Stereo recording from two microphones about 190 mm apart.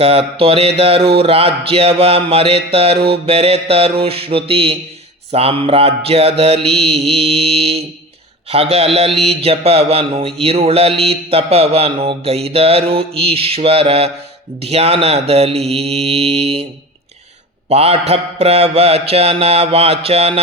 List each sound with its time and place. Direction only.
0.0 s speech: 30° right (ahead or behind)
17.7 s speech: 30° right (ahead or behind)